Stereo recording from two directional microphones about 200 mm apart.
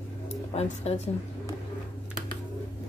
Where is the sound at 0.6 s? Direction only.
30° left (ahead or behind).